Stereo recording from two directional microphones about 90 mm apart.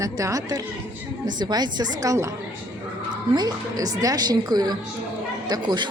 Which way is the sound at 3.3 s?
45° right (ahead or behind).